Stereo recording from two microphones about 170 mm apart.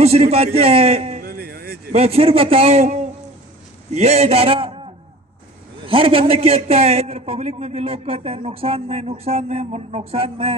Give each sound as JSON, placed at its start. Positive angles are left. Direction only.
{"t": 0.0, "sound": "a man's voice", "side_deg": -40}
{"t": 1.2, "sound": "a sound", "side_deg": -65}
{"t": 1.9, "sound": "a man's voice", "side_deg": -35}
{"t": 5.9, "sound": "a man's voice", "side_deg": -30}